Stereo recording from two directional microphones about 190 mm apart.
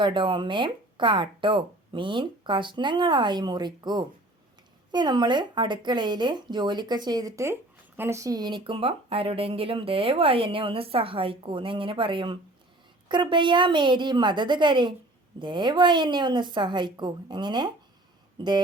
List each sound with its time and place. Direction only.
0.0 s speech: 25° right (ahead or behind)